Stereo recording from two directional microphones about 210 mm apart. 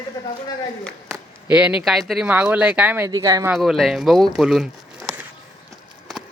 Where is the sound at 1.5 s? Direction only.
5° right (ahead or behind).